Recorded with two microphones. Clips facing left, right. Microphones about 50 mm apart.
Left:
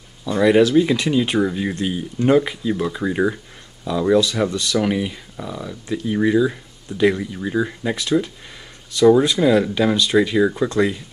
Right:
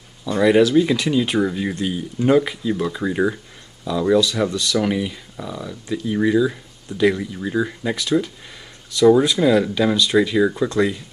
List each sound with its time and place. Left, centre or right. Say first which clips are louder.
0.2 s speech: even; centre
8.9 s speech: even; centre